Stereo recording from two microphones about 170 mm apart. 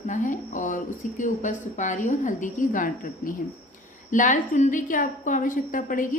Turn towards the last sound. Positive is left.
turn(degrees=50)  # may be behind; listen again after turning